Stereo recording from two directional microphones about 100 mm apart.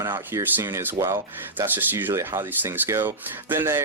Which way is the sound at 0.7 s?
20° right (ahead or behind).